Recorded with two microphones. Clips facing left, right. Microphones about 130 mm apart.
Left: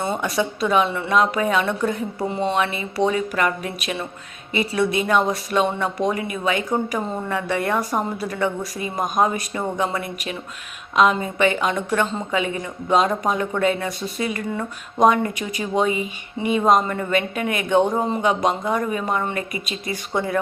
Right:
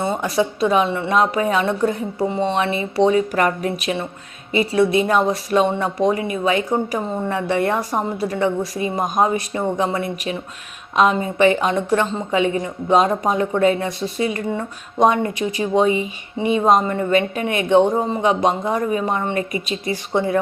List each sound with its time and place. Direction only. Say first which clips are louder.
0.0 s a woman's voice: right 3 dB; 30° right (ahead or behind)